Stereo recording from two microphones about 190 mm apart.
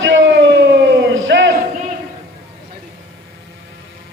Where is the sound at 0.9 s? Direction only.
75° right (ahead or behind).